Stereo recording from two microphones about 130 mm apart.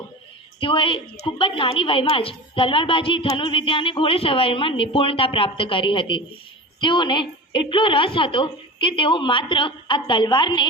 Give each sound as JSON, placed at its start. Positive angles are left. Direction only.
{"t": 0.6, "sound": "a woman's voice", "side_deg": 40}